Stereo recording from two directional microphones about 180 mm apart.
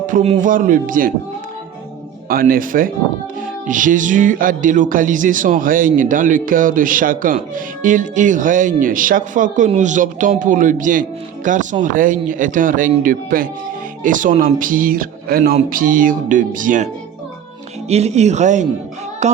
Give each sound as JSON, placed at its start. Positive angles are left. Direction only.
{"t": 0.0, "sound": "speech", "side_deg": -45}
{"t": 2.3, "sound": "speech", "side_deg": -55}
{"t": 19.2, "sound": "carnatic music", "side_deg": -40}